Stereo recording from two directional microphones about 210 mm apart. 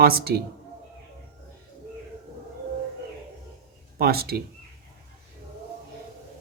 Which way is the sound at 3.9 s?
50° right (ahead or behind).